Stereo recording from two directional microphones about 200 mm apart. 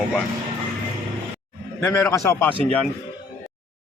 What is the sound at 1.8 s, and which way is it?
Speech, 10° left (ahead or behind).